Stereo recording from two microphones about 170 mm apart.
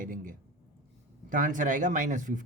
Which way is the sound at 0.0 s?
55° right (ahead or behind).